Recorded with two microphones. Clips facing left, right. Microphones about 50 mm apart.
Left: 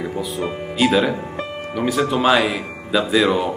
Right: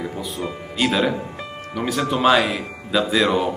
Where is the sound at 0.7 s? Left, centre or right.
Centre.